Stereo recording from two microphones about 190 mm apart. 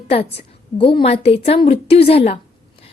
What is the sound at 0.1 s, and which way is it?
A woman's voice, 30° left (ahead or behind).